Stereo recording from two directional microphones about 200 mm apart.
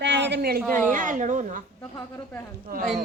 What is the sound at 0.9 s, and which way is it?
Speech, 40° right (ahead or behind).